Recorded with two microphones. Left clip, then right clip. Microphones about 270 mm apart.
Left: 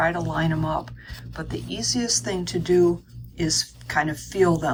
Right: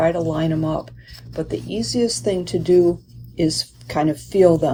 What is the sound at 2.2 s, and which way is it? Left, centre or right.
Speech, right.